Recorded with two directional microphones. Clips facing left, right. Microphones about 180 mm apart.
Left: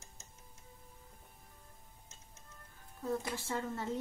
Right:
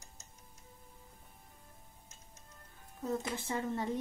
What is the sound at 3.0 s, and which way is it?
Speech, 20° right (ahead or behind).